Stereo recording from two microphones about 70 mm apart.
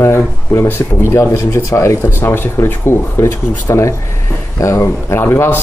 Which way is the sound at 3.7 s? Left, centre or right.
Left.